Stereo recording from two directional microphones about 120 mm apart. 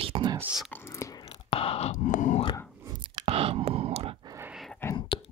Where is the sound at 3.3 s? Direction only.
55° right (ahead or behind).